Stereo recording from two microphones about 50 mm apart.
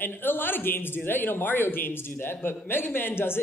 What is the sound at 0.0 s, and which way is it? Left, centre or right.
A man's voice, left.